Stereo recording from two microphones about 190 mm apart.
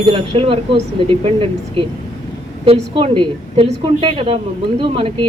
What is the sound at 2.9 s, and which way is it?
Speech, 25° right (ahead or behind).